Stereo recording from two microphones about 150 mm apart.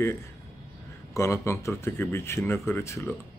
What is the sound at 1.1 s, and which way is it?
Speech, 20° left (ahead or behind).